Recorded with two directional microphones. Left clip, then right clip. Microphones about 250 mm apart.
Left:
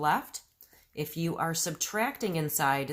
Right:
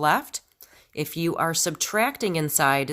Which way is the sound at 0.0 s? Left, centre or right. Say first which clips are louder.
Right 6 dB; right.